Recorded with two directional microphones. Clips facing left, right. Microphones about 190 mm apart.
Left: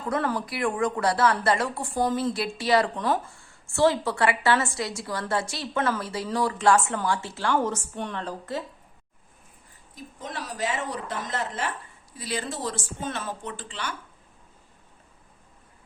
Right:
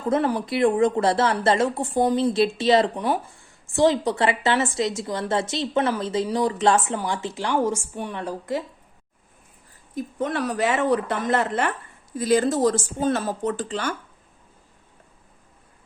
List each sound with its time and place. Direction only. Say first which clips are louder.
0.0 s speech: right 5 dB; 20° right (ahead or behind)
9.9 s speech: right 11 dB; 60° right (ahead or behind)
12.1 s speech: right 12 dB; 45° right (ahead or behind)